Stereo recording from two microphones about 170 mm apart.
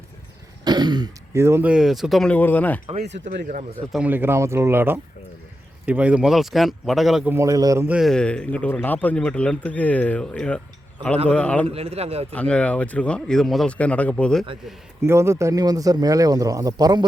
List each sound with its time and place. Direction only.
0.6 s speech: 25° right (ahead or behind); by 2.8 s 10° left (ahead or behind)
3.9 s speech: 10° right (ahead or behind)
7.3 s speech: 15° right (ahead or behind)
7.9 s speech: centre (ahead or behind)
11.7 s a man's voice: 35° right (ahead or behind)
12.3 s speech: 5° left (ahead or behind)
15.0 s speech: 15° right (ahead or behind)